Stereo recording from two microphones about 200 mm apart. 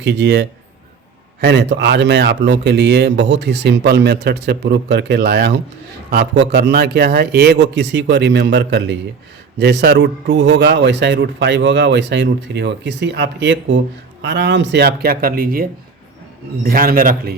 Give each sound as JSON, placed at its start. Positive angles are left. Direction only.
{"t": 0.0, "sound": "speech", "side_deg": -60}
{"t": 16.6, "sound": "speech", "side_deg": -45}